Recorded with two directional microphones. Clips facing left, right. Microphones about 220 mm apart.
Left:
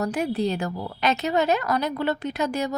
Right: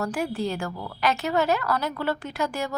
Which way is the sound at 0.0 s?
20° left (ahead or behind).